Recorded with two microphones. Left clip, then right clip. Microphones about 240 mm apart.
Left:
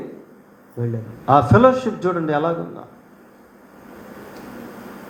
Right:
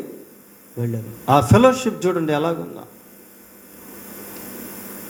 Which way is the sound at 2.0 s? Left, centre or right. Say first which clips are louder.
Even; right.